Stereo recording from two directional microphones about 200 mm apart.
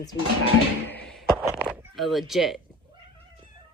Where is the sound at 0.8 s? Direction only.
5° left (ahead or behind).